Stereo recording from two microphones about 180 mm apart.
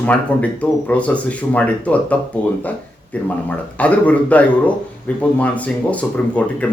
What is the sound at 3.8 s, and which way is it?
Speech, 10° left (ahead or behind).